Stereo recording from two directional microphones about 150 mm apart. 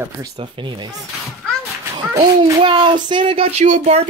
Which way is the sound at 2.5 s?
35° right (ahead or behind).